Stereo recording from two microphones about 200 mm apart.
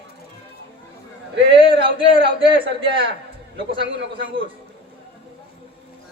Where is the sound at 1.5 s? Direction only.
25° right (ahead or behind).